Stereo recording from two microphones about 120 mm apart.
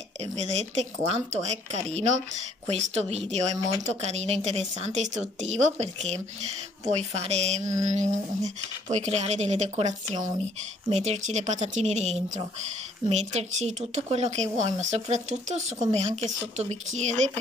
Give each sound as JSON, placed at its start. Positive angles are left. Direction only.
{"t": 0.2, "sound": "speech", "side_deg": -65}
{"t": 7.8, "sound": "a sound", "side_deg": -90}
{"t": 8.8, "sound": "speech", "side_deg": -65}
{"t": 13.1, "sound": "speech", "side_deg": -60}